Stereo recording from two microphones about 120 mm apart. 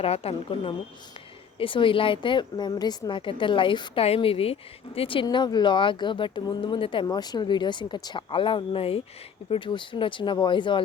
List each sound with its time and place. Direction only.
0.0 s a woman's voice: 55° left (ahead or behind)
5.2 s a woman's voice: 35° left (ahead or behind)